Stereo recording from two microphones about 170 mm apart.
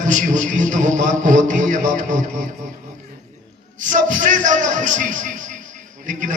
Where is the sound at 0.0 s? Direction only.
45° right (ahead or behind).